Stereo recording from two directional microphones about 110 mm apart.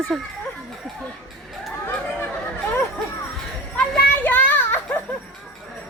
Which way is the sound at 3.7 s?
10° left (ahead or behind).